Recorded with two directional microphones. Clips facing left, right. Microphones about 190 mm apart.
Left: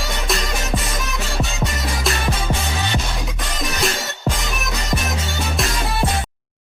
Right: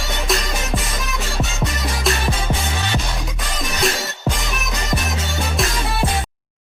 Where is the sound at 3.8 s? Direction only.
Centre (ahead or behind).